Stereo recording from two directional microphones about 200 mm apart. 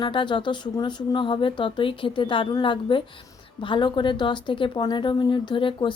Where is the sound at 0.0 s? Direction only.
25° left (ahead or behind).